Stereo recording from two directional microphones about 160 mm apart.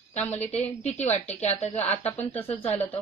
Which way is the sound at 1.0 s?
45° left (ahead or behind).